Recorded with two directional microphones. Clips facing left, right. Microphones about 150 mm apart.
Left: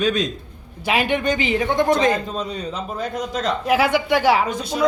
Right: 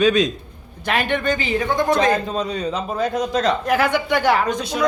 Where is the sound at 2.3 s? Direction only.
75° right (ahead or behind).